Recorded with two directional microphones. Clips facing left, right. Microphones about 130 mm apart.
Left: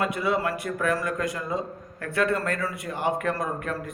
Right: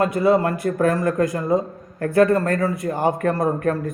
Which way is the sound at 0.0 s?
40° right (ahead or behind).